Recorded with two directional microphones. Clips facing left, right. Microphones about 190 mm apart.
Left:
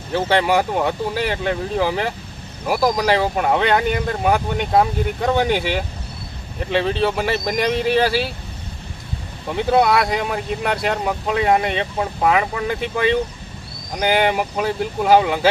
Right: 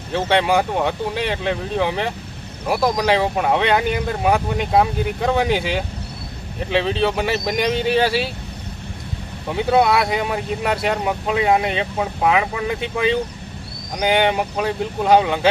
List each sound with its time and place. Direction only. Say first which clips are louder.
0.1 s speech: even; centre (ahead or behind)
9.5 s speech: even; centre (ahead or behind)